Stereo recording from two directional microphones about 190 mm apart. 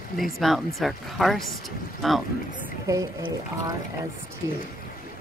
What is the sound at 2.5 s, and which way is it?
Speech, 20° right (ahead or behind).